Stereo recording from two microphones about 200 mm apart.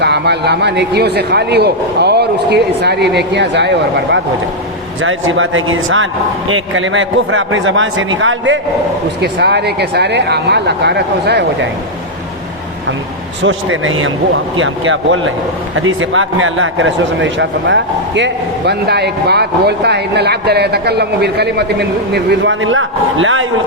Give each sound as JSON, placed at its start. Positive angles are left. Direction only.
{"t": 0.0, "sound": "a man's voice", "side_deg": -55}
{"t": 5.0, "sound": "a man's voice", "side_deg": -80}
{"t": 9.2, "sound": "a man's voice", "side_deg": -55}
{"t": 13.4, "sound": "a man's voice", "side_deg": -75}